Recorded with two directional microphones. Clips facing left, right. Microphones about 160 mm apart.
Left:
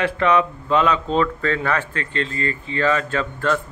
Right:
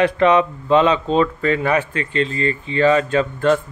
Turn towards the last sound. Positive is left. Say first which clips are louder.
# right 5 dB
turn(degrees=-20)  # may be behind; listen again after turning